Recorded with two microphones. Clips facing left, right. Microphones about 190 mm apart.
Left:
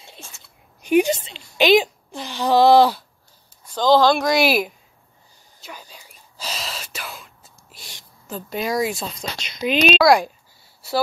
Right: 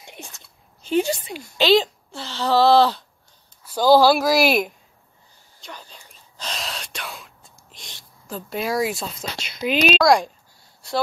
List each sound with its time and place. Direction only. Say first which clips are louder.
0.0 s a sound: right 3 dB; 15° right (ahead or behind)
0.8 s a woman's voice: left 4 dB; 15° left (ahead or behind)
3.6 s speech: right 1 dB; 10° right (ahead or behind)
5.6 s whispering: even; 10° left (ahead or behind)
9.9 s speech: left 2 dB; 5° left (ahead or behind)
10.8 s a sound: left 2 dB; 5° left (ahead or behind)